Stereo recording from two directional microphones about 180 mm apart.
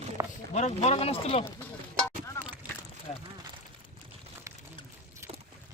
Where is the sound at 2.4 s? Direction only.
15° left (ahead or behind).